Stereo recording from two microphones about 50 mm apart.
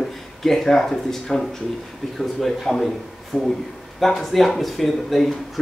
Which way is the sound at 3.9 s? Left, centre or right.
Centre.